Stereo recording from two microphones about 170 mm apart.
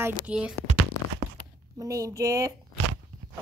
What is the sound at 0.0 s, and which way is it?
Speech, 5° right (ahead or behind).